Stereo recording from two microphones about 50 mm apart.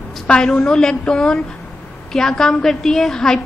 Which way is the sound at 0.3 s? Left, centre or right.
Centre.